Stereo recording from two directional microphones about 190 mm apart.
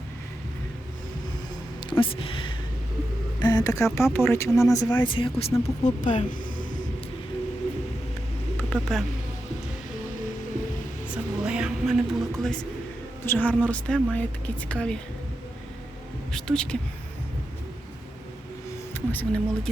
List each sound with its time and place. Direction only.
1.9 s speech: 25° left (ahead or behind)
5.1 s speech: 30° left (ahead or behind)
6.0 s speech: 40° left (ahead or behind)
8.5 s a sound: 5° left (ahead or behind)
11.1 s music: 5° right (ahead or behind)
13.2 s a woman's voice: 10° left (ahead or behind)
16.3 s speech: 5° left (ahead or behind)
18.9 s speech: 10° left (ahead or behind)